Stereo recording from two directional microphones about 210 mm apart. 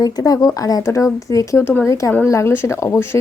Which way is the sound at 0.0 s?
15° left (ahead or behind).